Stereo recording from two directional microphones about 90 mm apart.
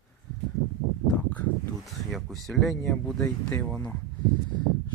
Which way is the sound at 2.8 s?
5° left (ahead or behind).